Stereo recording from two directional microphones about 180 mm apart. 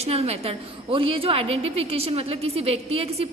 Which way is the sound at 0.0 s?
35° right (ahead or behind).